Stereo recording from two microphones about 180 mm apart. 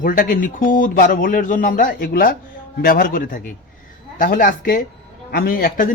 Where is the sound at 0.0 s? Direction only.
45° left (ahead or behind).